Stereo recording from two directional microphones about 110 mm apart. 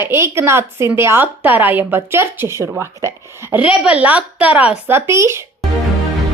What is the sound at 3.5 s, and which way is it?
A woman's voice, 10° right (ahead or behind).